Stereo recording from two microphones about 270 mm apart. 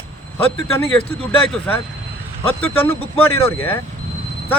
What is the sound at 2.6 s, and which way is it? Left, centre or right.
Speech, centre.